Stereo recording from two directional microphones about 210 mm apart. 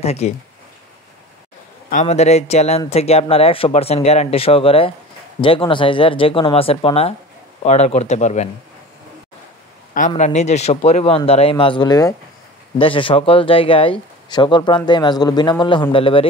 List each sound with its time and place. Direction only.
0.0 s speech: 30° left (ahead or behind)
1.9 s speech: 35° left (ahead or behind)
9.9 s speech: 35° left (ahead or behind)